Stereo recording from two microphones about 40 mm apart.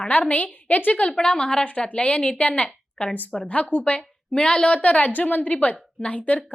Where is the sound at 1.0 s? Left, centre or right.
Left.